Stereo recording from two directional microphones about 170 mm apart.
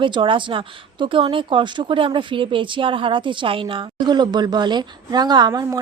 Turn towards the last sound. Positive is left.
turn(degrees=-20)  # may be behind; listen again after turning